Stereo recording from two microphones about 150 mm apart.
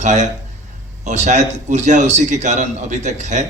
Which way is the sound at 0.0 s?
55° right (ahead or behind).